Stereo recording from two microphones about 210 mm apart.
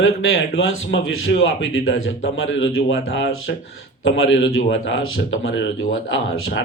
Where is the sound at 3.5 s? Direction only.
55° left (ahead or behind).